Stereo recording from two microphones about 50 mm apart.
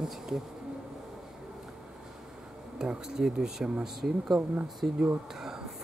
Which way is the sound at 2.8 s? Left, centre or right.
Centre.